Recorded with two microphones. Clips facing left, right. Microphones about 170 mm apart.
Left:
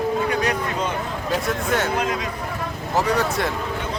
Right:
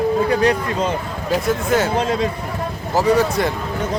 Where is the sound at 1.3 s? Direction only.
Centre (ahead or behind).